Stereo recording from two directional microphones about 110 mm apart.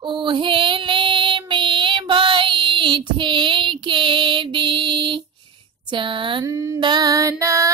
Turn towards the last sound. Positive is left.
turn(degrees=-30)  # may be behind; listen again after turning